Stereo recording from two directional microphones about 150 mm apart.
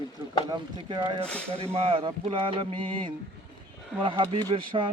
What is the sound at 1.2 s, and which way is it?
Speech, 5° left (ahead or behind).